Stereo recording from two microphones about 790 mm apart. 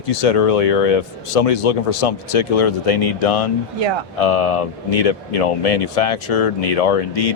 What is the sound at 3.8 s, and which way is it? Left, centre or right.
Speech, right.